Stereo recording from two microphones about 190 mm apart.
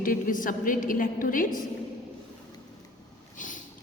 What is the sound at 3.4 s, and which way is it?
Boat, 45° left (ahead or behind).